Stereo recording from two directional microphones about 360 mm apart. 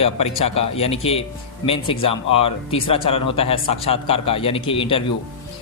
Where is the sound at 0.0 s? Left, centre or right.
Centre.